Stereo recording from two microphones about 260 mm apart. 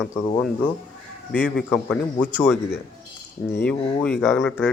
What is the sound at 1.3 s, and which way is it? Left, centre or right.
A man's voice, centre.